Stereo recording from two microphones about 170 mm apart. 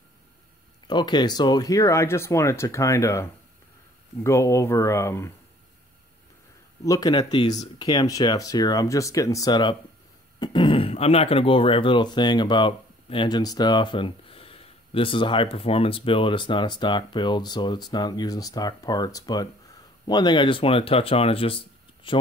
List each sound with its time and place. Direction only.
0.8 s speech: 25° left (ahead or behind)
6.8 s speech: 20° left (ahead or behind)